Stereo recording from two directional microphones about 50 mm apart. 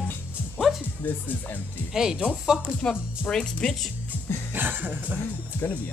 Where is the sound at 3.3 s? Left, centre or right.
Centre.